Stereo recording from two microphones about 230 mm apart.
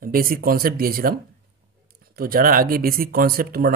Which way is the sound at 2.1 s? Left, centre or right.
Right.